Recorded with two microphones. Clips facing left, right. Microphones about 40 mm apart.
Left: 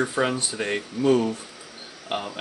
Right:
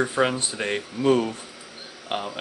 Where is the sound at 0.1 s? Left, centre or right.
Centre.